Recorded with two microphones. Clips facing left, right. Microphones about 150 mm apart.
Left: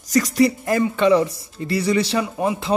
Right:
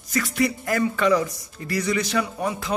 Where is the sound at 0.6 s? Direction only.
25° left (ahead or behind).